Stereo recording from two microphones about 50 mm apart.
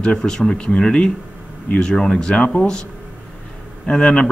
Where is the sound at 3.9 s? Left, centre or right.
Centre.